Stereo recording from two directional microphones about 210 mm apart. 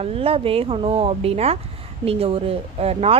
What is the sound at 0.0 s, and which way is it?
A woman's voice, 30° right (ahead or behind).